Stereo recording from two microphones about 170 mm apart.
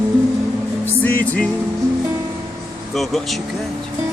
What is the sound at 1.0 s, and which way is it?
Music, 10° left (ahead or behind).